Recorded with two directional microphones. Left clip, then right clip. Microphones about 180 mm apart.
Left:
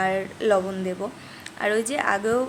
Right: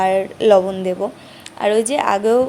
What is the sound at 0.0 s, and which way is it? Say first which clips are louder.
A woman's voice: right 8 dB; 25° right (ahead or behind).